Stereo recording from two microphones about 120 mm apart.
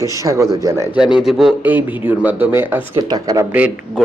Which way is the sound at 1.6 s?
15° right (ahead or behind).